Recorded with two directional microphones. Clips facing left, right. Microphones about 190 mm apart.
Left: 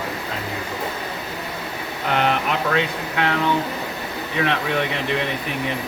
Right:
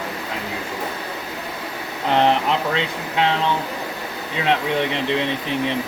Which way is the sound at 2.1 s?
25° right (ahead or behind).